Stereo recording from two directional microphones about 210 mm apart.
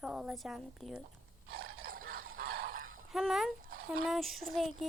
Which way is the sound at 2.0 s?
90° right.